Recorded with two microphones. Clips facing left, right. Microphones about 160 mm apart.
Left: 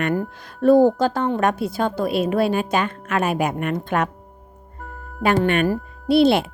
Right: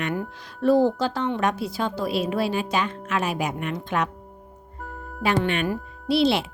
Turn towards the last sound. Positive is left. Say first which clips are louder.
# left 5 dB
turn(degrees=50)  # may be behind; listen again after turning